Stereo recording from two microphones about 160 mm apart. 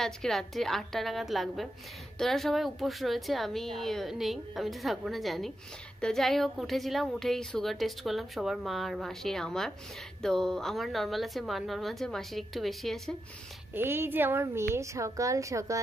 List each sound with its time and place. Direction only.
0.0 s a woman's voice: centre (ahead or behind)
13.7 s a woman's voice: 15° right (ahead or behind)